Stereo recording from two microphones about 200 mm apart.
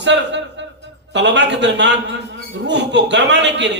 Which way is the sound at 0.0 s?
65° right (ahead or behind).